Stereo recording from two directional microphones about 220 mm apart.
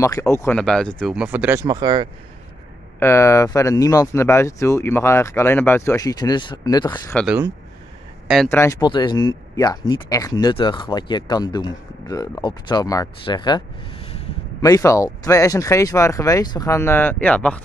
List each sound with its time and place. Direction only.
0.0 s speech: 15° left (ahead or behind); by 2.0 s 20° right (ahead or behind)
3.0 s speech: 10° left (ahead or behind)
7.2 s speech: 5° right (ahead or behind)
8.5 s speech: 10° left (ahead or behind)